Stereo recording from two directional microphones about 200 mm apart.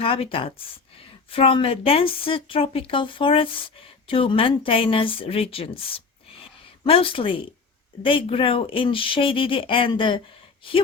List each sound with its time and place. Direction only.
0.0 s speech: 25° left (ahead or behind)